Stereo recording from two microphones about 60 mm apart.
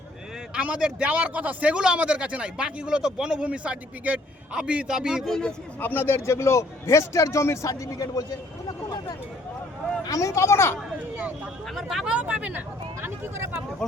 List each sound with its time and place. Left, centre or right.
0.6 s speech: centre
1.1 s speech: right; by 5.2 s centre
5.8 s a man's voice: left
10.1 s a man's voice: left
11.7 s speech: centre
12.0 s speech: right
13.0 s speech: right